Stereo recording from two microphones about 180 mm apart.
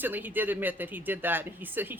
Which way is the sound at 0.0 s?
10° right (ahead or behind).